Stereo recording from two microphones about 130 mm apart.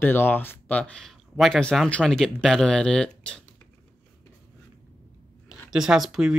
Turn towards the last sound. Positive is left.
turn(degrees=0)  # may be behind; listen again after turning